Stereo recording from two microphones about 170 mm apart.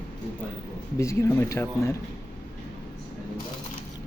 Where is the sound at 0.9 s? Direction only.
15° left (ahead or behind).